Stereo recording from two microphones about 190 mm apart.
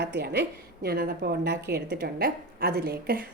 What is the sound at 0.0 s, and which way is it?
A woman's voice, 60° right (ahead or behind).